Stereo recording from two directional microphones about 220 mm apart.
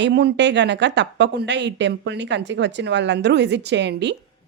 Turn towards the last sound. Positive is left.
turn(degrees=-50)  # may be behind; listen again after turning